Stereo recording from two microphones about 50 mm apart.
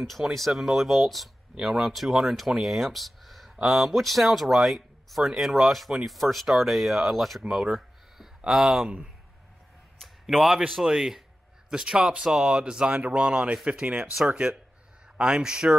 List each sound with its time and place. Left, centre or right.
0.0 s speech: centre
2.6 s a sound: centre
3.5 s speech: centre
3.8 s speech: centre
7.4 s a sound: centre
8.5 s speech: centre
9.9 s a sound: centre
10.8 s speech: centre
14.1 s speech: centre
15.1 s speech: right